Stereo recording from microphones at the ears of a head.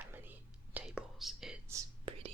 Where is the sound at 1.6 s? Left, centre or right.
Right.